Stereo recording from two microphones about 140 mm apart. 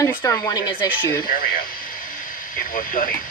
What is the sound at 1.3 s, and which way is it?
Speech, 90° left.